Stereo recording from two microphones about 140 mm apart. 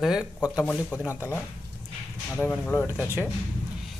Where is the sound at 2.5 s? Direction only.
15° left (ahead or behind).